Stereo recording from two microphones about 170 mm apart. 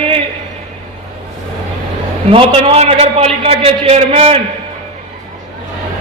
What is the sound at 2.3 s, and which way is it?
A man's voice, 35° right (ahead or behind).